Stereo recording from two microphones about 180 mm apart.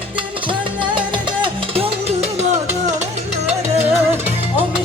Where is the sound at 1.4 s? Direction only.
35° right (ahead or behind).